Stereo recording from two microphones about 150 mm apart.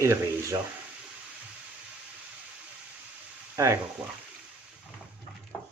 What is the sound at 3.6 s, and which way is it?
Speech, 25° right (ahead or behind).